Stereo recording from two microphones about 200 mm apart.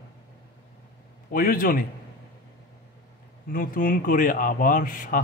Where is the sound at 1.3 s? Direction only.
45° left (ahead or behind).